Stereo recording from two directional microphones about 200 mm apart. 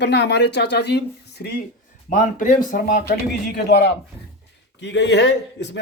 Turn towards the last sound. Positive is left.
turn(degrees=60)  # may be behind; listen again after turning